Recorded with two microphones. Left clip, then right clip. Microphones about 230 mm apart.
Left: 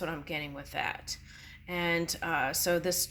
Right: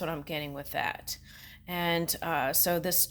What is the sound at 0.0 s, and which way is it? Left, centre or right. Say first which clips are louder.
Speech: right 1 dB; right.